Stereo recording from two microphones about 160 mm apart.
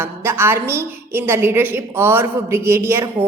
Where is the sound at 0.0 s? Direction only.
15° right (ahead or behind).